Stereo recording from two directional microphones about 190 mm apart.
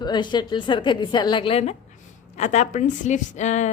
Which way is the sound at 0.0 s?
25° left (ahead or behind).